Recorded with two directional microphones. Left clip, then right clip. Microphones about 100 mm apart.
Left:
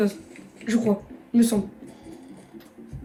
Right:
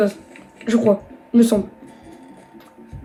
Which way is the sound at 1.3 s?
25° right (ahead or behind).